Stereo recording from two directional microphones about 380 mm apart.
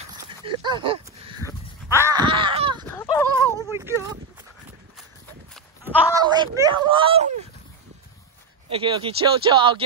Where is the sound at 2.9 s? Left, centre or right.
Centre.